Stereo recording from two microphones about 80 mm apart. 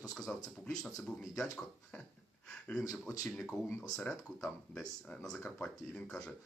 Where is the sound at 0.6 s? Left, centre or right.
Centre.